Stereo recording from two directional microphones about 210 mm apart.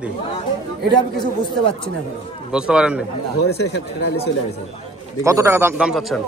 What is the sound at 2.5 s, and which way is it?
Speech, 5° right (ahead or behind).